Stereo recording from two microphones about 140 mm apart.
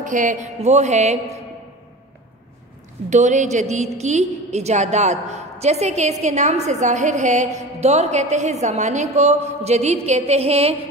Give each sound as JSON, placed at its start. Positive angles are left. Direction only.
{"t": 0.0, "sound": "a woman's voice", "side_deg": -65}
{"t": 3.1, "sound": "a woman's voice", "side_deg": -60}